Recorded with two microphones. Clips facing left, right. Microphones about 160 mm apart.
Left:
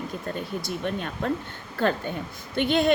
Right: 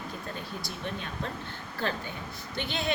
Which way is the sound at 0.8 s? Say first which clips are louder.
Left 8 dB; 55° left (ahead or behind).